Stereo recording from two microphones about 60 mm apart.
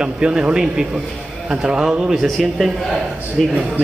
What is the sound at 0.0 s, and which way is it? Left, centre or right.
A man's voice, centre.